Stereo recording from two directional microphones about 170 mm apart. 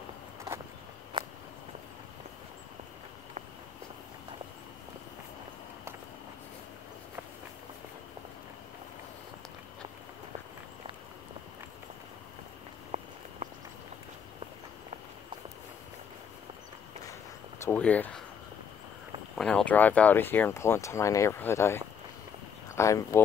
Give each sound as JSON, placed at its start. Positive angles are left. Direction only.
{"t": 1.1, "sound": "walk", "side_deg": -25}
{"t": 12.9, "sound": "a sound", "side_deg": -40}
{"t": 17.6, "sound": "speech", "side_deg": 10}
{"t": 19.3, "sound": "speech", "side_deg": 5}